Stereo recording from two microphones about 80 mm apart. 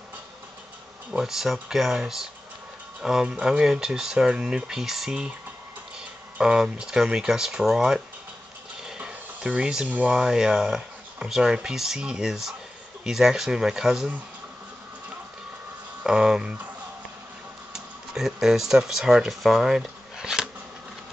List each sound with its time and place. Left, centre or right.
1.1 s speech: centre
8.8 s a sound: centre
9.8 s speech: centre
10.1 s speech: centre
16.0 s speech: centre
17.7 s speech: centre